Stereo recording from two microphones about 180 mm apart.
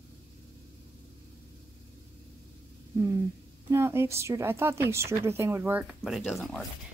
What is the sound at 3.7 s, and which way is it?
Speech, 15° right (ahead or behind).